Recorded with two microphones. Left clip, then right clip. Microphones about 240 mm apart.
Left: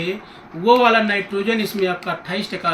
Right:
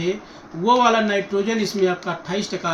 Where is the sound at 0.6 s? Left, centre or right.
Centre.